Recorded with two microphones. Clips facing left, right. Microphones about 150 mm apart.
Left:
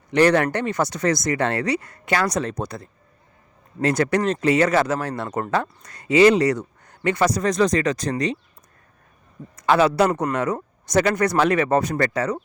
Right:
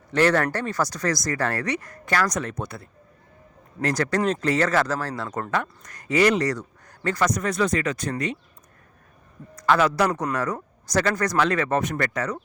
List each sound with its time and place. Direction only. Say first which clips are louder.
0.1 s speech: left 3 dB; 15° left (ahead or behind)
2.6 s speech: left 4 dB; 40° left (ahead or behind)
3.8 s speech: left 3 dB; 25° left (ahead or behind)
9.6 s speech: left 3 dB; 25° left (ahead or behind)